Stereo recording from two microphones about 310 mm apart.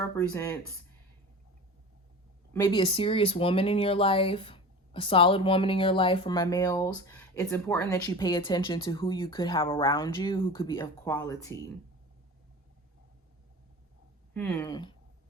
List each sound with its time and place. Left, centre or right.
0.0 s speech: centre
2.5 s speech: centre
14.3 s speech: centre